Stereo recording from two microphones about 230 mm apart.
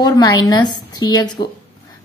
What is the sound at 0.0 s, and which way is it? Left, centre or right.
A woman's voice, centre.